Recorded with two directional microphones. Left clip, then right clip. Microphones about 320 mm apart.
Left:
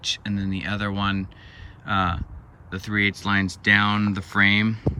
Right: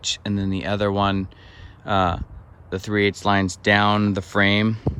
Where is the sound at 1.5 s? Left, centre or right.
Centre.